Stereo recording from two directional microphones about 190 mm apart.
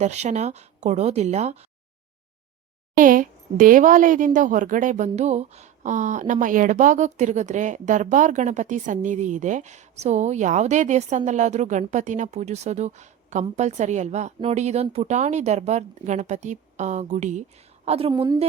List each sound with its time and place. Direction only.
0.0 s speech: 35° right (ahead or behind)
2.9 s a woman's voice: 45° right (ahead or behind)
18.1 s a woman's voice: 20° right (ahead or behind)